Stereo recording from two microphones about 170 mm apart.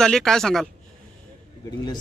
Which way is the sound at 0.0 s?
5° left (ahead or behind).